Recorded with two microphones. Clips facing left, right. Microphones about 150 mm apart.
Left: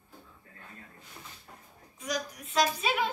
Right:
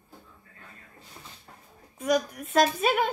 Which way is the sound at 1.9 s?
55° right (ahead or behind).